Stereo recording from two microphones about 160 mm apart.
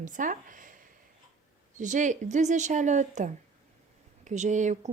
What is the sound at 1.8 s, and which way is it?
A woman's voice, 50° right (ahead or behind).